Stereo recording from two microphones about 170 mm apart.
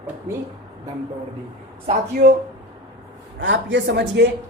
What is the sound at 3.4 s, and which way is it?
Speech, 90° right.